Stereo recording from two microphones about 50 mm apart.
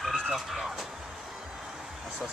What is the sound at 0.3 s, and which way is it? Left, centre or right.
Music, centre.